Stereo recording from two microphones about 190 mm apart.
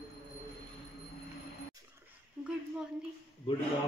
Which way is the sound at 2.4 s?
Centre (ahead or behind).